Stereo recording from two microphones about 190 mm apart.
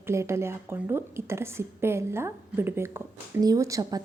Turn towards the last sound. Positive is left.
turn(degrees=-15)  # may be behind; listen again after turning